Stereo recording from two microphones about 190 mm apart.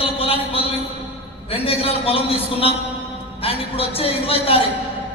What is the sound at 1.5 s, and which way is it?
A man's voice, 30° left (ahead or behind).